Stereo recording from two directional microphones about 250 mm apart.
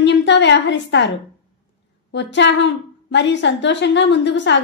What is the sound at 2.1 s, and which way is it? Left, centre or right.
A woman's voice, left.